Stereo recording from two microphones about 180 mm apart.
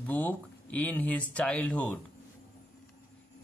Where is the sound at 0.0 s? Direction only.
10° left (ahead or behind).